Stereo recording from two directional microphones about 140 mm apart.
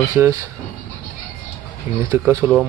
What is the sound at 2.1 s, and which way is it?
Speech, 20° right (ahead or behind).